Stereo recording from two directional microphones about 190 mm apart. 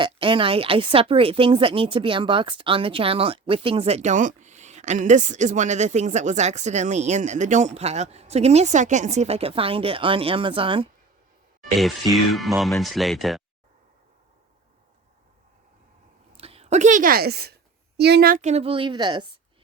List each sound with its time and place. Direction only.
0.0 s a woman's voice: 25° right (ahead or behind)
11.8 s speech: centre (ahead or behind)
16.4 s a woman's voice: 30° right (ahead or behind)